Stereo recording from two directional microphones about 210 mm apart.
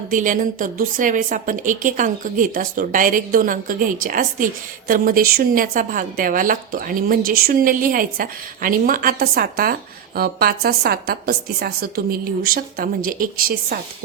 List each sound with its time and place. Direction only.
0.1 s a woman's voice: 40° right (ahead or behind)